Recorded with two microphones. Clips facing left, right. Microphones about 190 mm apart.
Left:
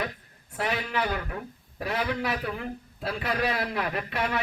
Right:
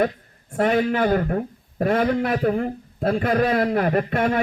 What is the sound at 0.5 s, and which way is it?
A man's voice, 50° right (ahead or behind).